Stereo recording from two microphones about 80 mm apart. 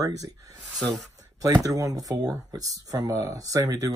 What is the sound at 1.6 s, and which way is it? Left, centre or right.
Speech, right.